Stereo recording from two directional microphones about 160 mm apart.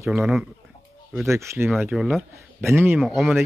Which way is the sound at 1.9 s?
Centre (ahead or behind).